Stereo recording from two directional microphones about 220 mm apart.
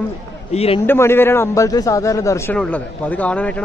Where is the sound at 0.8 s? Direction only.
10° left (ahead or behind).